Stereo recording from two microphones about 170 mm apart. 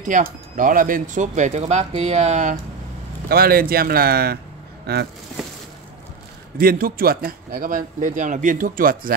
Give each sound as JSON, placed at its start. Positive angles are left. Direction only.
{"t": 0.0, "sound": "speech", "side_deg": -50}
{"t": 3.3, "sound": "a man's voice", "side_deg": -60}
{"t": 6.6, "sound": "a man's voice", "side_deg": -60}